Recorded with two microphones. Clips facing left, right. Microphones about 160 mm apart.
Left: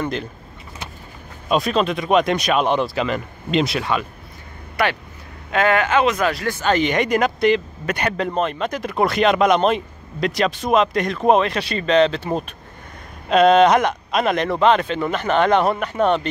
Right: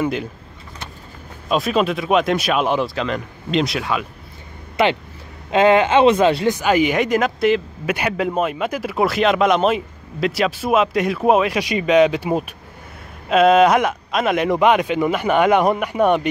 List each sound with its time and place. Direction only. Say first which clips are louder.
0.0 s speech: right 3 dB; 10° right (ahead or behind)
1.5 s speech: right 1 dB; 5° right (ahead or behind)
4.8 s speech: right 4 dB; 20° right (ahead or behind)